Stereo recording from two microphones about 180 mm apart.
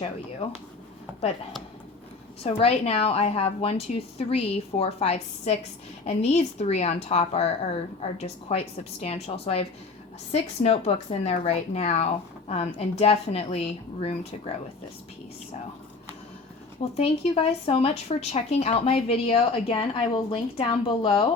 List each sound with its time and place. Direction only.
2.4 s speech: 35° left (ahead or behind)
16.8 s speech: 30° left (ahead or behind)